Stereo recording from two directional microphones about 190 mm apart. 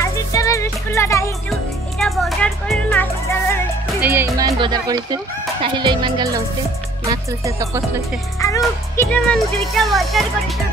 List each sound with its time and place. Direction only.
0.0 s music: 15° left (ahead or behind)
1.5 s music: centre (ahead or behind)
4.0 s music: 10° right (ahead or behind)
4.4 s speech: 20° right (ahead or behind)
8.4 s speech: 20° left (ahead or behind); by 10.2 s centre (ahead or behind)